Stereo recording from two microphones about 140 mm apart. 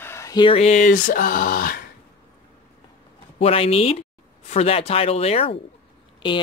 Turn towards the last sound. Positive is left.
turn(degrees=35)  # may be behind; listen again after turning